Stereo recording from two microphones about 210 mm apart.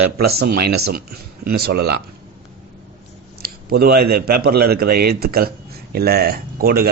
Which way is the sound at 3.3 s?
45° right (ahead or behind).